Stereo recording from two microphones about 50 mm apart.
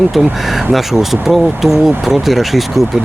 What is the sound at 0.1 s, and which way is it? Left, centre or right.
Speech, centre.